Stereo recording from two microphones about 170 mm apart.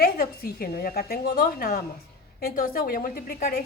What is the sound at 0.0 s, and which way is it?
A woman's voice, 60° left (ahead or behind).